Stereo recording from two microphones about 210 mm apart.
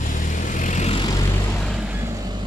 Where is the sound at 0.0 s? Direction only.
40° left (ahead or behind).